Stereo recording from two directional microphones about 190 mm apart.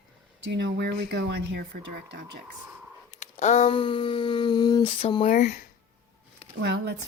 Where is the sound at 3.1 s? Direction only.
35° left (ahead or behind).